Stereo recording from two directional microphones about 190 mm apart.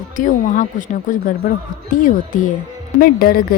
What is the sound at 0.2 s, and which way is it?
A woman's voice, 45° left (ahead or behind).